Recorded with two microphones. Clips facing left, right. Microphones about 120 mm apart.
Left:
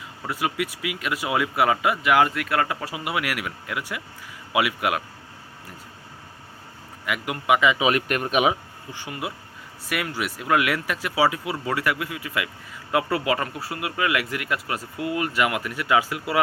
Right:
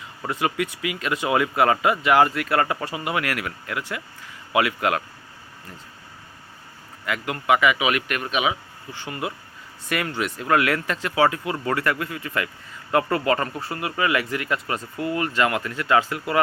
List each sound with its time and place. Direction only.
0.3 s speech: 5° left (ahead or behind)
7.0 s speech: 15° left (ahead or behind)
7.8 s speech: 35° left (ahead or behind)
8.9 s speech: 10° left (ahead or behind)